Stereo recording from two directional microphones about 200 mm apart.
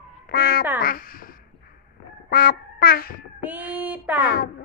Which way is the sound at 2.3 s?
50° left (ahead or behind).